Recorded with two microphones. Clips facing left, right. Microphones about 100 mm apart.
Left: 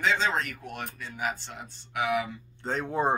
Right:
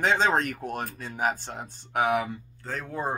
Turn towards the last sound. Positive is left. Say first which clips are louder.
# left 4 dB
turn(degrees=25)  # may be behind; listen again after turning